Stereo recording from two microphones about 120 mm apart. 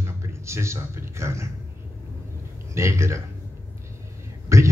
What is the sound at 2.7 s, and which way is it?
Speech, 25° right (ahead or behind).